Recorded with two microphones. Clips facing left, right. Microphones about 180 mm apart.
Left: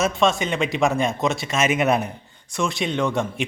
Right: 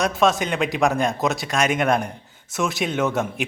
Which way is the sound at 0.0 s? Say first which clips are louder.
Even; centre (ahead or behind).